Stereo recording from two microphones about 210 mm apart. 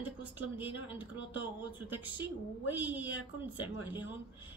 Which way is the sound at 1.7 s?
10° right (ahead or behind).